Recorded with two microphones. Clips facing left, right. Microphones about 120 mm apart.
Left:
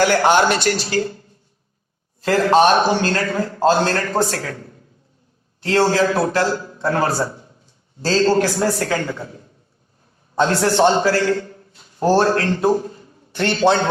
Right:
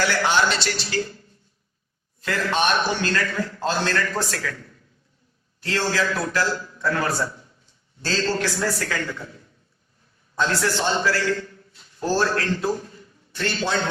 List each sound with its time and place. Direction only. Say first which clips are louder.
0.0 s speech: left 7 dB; 50° left (ahead or behind)
2.2 s a man's voice: left 9 dB; 35° left (ahead or behind)
10.5 s a man's voice: left 9 dB; 40° left (ahead or behind)
13.3 s a man's voice: left 7 dB; 65° left (ahead or behind)